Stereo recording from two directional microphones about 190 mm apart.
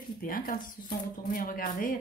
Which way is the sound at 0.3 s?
50° left (ahead or behind).